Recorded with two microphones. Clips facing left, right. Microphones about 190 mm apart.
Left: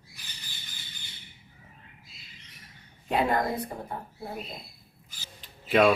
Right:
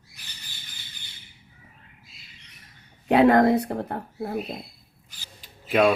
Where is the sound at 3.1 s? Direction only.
75° right (ahead or behind).